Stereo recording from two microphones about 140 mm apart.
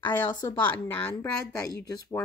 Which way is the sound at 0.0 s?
15° left (ahead or behind).